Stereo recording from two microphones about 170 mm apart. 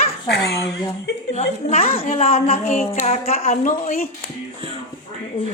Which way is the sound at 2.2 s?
35° left (ahead or behind).